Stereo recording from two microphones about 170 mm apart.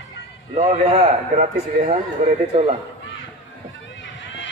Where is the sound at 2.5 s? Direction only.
35° right (ahead or behind).